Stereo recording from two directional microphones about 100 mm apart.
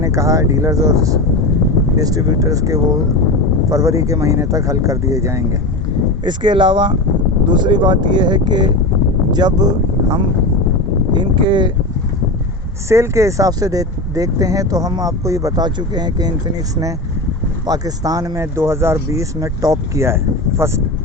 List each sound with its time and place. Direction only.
0.0 s speech: 30° right (ahead or behind)
6.2 s speech: 50° right (ahead or behind)
12.9 s speech: 30° right (ahead or behind)
17.7 s speech: 40° right (ahead or behind)